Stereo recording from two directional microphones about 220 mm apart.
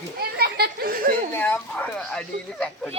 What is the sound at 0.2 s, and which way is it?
Children playing, 45° right (ahead or behind).